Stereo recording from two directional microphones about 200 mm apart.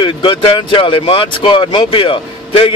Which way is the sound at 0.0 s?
25° left (ahead or behind).